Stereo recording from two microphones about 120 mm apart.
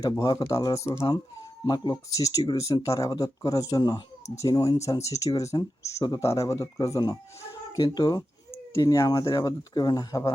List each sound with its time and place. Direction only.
0.0 s speech: 30° left (ahead or behind)
1.6 s speech: 35° left (ahead or behind)